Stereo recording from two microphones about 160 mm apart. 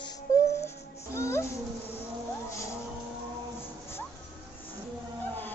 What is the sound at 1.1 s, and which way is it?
Music, 15° left (ahead or behind).